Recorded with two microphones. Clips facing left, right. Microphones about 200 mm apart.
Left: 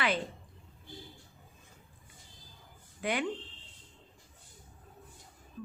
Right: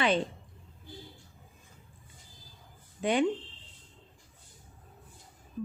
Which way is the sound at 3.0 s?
25° right (ahead or behind).